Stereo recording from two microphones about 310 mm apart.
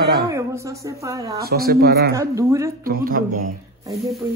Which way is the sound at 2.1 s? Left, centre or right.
Centre.